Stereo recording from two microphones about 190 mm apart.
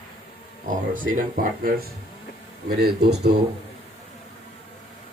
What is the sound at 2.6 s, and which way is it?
Speech, 55° right (ahead or behind).